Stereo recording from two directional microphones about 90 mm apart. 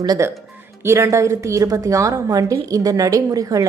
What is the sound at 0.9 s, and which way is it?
A woman's voice, 30° right (ahead or behind).